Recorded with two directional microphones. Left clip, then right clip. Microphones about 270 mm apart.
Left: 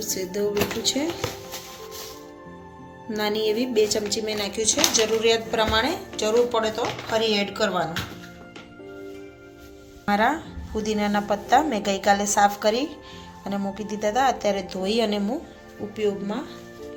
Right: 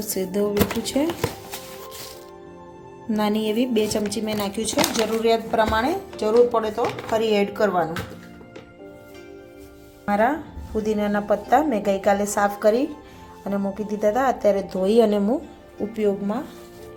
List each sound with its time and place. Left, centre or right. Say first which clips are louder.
0.1 s speech: right 3 dB; right
3.1 s speech: even; right
10.1 s a woman's voice: right 1 dB; centre
14.0 s a woman's voice: right 2 dB; centre; by 16.4 s right